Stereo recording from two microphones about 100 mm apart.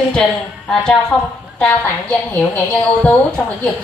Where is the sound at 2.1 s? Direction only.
15° left (ahead or behind).